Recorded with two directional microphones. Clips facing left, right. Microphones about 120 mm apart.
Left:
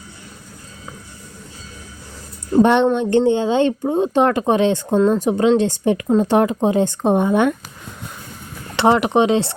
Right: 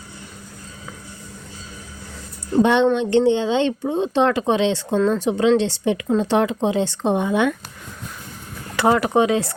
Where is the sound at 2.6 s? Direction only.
50° left (ahead or behind).